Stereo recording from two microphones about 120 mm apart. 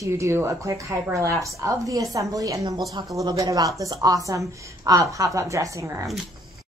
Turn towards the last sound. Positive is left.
turn(degrees=-25)  # may be behind; listen again after turning